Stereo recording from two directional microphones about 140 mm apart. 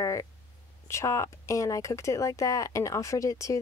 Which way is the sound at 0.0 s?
25° left (ahead or behind).